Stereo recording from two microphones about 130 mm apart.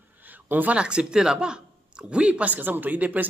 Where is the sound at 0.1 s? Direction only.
15° right (ahead or behind).